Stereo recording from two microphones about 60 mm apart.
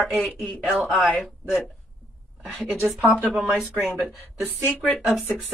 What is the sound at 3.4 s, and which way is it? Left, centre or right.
Speech, centre.